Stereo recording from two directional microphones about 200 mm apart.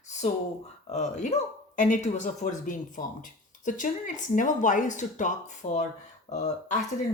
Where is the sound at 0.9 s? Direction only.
35° left (ahead or behind).